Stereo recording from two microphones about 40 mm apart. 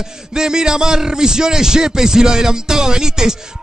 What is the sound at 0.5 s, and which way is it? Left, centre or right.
Speech, centre.